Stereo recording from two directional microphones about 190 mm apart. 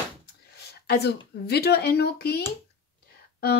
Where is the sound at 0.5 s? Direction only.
60° left (ahead or behind).